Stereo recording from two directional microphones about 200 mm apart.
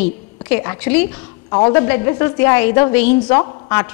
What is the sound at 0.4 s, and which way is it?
A woman's voice, 10° left (ahead or behind).